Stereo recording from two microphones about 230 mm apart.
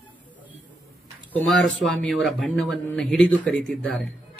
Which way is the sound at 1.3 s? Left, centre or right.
Centre.